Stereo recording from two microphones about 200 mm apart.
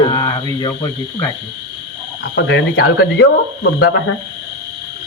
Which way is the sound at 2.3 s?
60° left (ahead or behind).